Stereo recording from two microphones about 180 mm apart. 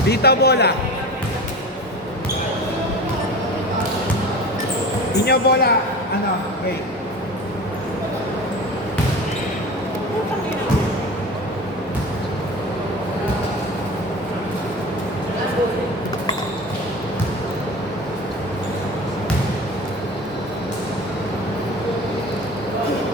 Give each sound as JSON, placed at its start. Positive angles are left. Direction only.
{"t": 0.1, "sound": "speech", "side_deg": 65}
{"t": 5.2, "sound": "speech", "side_deg": 60}